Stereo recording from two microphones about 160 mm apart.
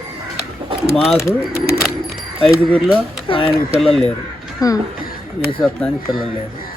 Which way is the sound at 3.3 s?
35° left (ahead or behind).